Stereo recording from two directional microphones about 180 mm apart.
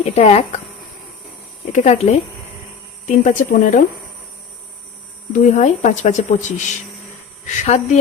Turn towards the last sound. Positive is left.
turn(degrees=40)  # may be behind; listen again after turning